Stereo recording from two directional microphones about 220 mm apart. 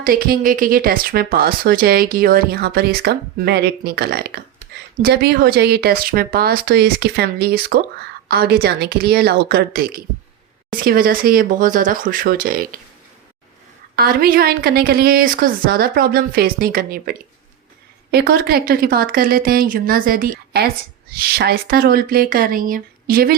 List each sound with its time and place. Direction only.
0.0 s speech: 40° right (ahead or behind)
13.9 s speech: 45° right (ahead or behind)